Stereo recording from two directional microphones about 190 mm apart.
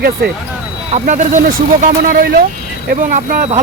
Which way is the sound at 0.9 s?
40° right (ahead or behind).